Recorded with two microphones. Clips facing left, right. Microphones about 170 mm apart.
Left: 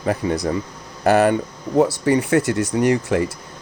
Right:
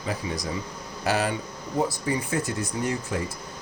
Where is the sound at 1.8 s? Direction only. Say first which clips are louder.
Left 10 dB; 70° left (ahead or behind).